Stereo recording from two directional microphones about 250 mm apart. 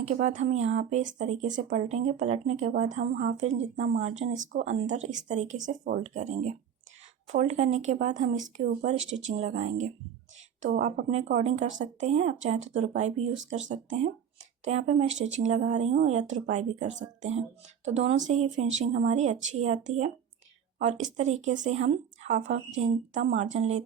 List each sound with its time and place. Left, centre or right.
0.0 s speech: right